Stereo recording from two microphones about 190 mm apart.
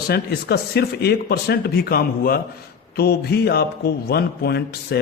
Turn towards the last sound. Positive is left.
turn(degrees=55)  # may be behind; listen again after turning